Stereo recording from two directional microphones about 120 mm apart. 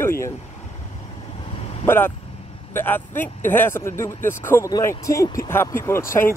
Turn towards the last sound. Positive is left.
turn(degrees=20)  # may be behind; listen again after turning